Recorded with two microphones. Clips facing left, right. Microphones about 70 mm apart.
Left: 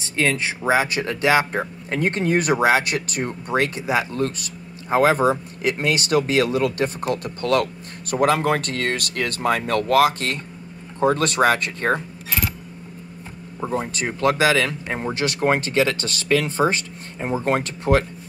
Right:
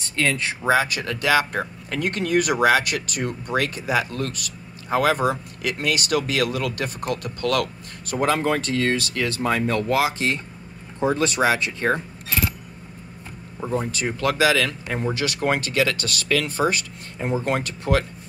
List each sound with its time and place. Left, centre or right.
0.7 s a man's voice: left
8.2 s speech: left
13.7 s speech: left